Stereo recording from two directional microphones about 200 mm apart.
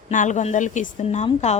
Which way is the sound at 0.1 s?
40° left (ahead or behind).